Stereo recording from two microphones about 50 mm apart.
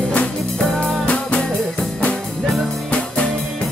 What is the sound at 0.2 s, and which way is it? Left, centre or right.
Music, left.